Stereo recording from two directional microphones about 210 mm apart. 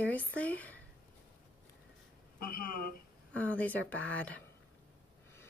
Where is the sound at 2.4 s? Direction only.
45° left (ahead or behind).